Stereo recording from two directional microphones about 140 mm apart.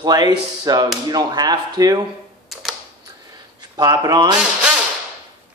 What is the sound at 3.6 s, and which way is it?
Speech, 30° right (ahead or behind).